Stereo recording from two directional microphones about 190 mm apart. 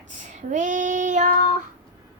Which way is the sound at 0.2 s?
40° right (ahead or behind).